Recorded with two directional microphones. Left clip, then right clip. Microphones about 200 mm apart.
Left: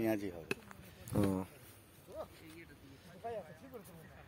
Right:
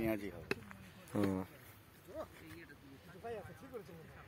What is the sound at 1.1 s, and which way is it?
Speech, 25° left (ahead or behind).